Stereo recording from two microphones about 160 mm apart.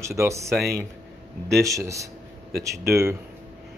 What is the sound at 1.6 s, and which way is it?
A man's voice, 20° right (ahead or behind).